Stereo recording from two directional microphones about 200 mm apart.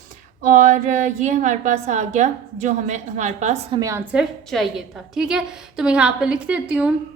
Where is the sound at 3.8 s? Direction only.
15° right (ahead or behind).